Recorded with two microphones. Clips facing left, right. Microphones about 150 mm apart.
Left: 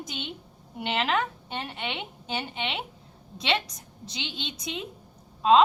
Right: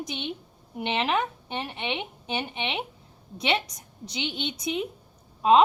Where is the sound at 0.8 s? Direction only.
25° right (ahead or behind).